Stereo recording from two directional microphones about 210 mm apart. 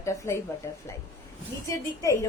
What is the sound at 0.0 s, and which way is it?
Speech, 10° left (ahead or behind).